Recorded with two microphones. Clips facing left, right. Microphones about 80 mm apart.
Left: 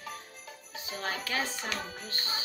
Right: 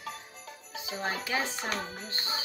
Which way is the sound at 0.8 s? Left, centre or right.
Centre.